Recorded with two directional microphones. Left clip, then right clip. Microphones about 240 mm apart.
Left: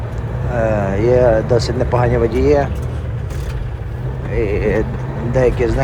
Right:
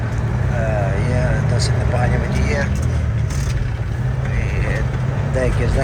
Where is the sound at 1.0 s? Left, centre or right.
Centre.